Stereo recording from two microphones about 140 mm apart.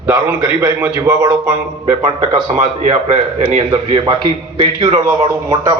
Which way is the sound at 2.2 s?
60° right (ahead or behind).